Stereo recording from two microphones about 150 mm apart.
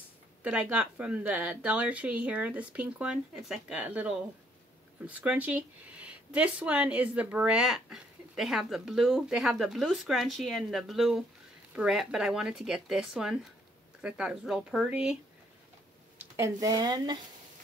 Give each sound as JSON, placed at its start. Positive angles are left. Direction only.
{"t": 0.4, "sound": "speech", "side_deg": -10}
{"t": 16.2, "sound": "speech", "side_deg": -20}